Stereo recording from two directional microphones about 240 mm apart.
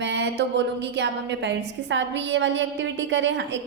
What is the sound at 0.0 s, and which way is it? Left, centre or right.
A woman's voice, right.